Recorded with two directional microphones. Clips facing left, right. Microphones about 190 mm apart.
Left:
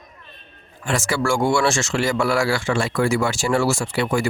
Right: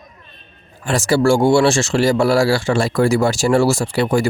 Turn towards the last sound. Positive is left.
turn(degrees=-35)  # may be behind; listen again after turning